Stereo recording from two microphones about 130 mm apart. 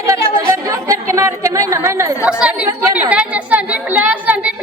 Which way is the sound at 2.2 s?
10° right (ahead or behind).